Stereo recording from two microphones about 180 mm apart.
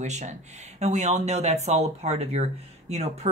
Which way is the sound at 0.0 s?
40° right (ahead or behind).